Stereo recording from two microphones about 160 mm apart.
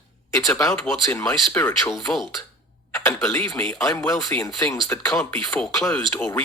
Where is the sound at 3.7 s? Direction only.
20° left (ahead or behind).